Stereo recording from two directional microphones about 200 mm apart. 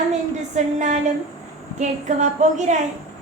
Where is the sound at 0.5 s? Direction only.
35° right (ahead or behind).